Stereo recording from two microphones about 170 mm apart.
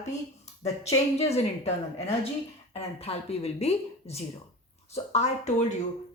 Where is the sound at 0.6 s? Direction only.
40° left (ahead or behind).